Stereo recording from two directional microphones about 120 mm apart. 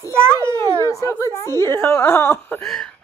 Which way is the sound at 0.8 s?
25° left (ahead or behind).